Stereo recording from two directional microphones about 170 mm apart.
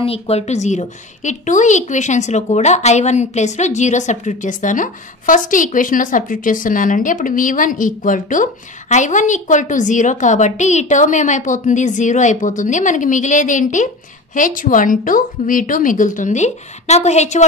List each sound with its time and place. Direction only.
0.0 s a woman's voice: 35° left (ahead or behind)